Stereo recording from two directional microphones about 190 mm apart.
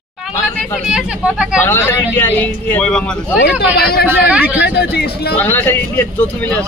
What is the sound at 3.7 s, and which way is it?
Speech, 55° left (ahead or behind).